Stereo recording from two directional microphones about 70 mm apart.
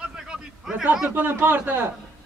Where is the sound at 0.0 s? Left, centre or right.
Centre.